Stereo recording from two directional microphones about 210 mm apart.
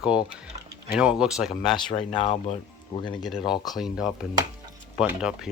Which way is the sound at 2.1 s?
25° left (ahead or behind).